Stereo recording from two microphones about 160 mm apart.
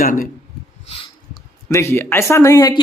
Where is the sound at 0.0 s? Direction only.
60° left (ahead or behind).